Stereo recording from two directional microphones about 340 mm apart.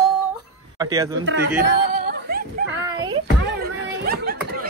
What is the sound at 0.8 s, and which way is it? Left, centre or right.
Speech, centre.